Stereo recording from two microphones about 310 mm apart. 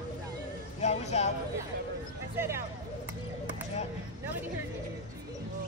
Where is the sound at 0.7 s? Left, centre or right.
Left.